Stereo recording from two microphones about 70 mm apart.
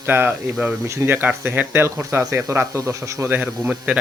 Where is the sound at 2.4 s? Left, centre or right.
Right.